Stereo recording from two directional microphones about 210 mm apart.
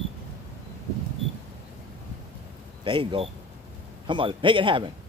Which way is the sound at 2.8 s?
25° right (ahead or behind).